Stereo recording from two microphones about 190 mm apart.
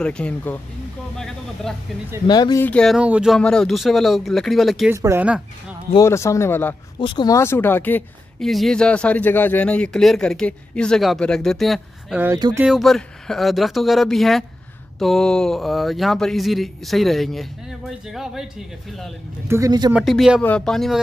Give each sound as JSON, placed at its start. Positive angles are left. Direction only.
{"t": 0.0, "sound": "speech", "side_deg": 5}
{"t": 2.2, "sound": "speech", "side_deg": 25}
{"t": 2.6, "sound": "speech", "side_deg": 5}
{"t": 4.9, "sound": "speech", "side_deg": -15}
{"t": 5.9, "sound": "a man's voice", "side_deg": 15}
{"t": 7.0, "sound": "speech", "side_deg": 25}
{"t": 19.4, "sound": "speech", "side_deg": -15}
{"t": 19.9, "sound": "speech", "side_deg": 0}